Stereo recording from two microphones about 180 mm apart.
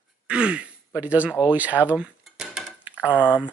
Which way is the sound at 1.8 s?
5° right (ahead or behind).